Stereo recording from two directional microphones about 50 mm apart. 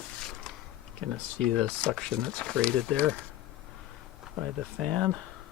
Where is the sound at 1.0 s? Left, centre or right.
Centre.